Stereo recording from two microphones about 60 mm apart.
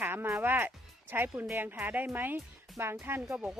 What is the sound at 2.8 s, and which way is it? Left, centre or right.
Speech, right.